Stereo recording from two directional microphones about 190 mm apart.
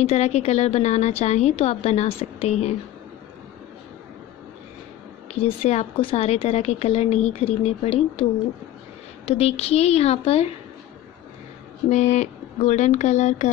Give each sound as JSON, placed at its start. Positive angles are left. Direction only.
{"t": 0.0, "sound": "speech", "side_deg": 35}
{"t": 5.3, "sound": "speech", "side_deg": 35}
{"t": 11.9, "sound": "speech", "side_deg": 35}